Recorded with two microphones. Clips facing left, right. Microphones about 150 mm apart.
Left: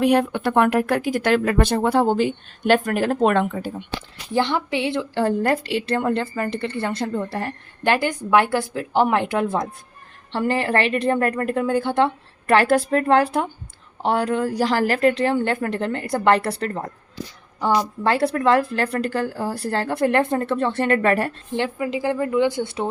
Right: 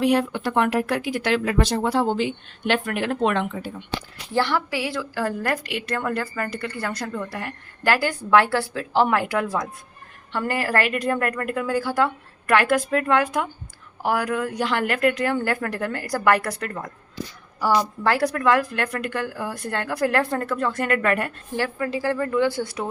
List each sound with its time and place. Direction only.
0.0 s speech: 55° left (ahead or behind)
4.4 s a woman's voice: 20° left (ahead or behind)
17.6 s a woman's voice: 20° left (ahead or behind)